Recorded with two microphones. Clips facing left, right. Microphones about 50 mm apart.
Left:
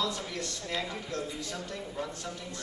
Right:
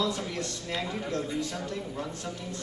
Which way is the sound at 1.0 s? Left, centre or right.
Right.